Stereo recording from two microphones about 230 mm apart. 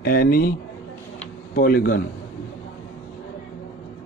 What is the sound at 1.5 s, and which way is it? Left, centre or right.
Speech, left.